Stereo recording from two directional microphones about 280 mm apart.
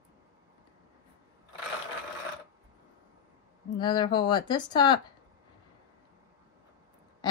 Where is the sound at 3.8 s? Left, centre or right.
Centre.